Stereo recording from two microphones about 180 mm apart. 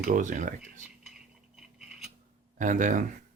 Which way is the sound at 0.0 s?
45° right (ahead or behind).